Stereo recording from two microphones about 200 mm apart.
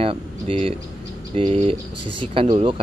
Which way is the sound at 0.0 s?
25° right (ahead or behind).